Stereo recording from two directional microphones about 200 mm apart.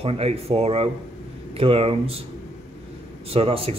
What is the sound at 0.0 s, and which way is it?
Speech, 30° right (ahead or behind).